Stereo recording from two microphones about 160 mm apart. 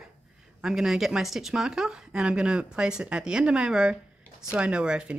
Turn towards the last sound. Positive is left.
turn(degrees=-5)  # may be behind; listen again after turning